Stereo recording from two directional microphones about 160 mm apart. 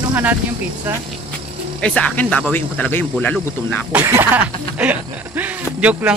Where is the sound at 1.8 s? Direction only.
5° left (ahead or behind).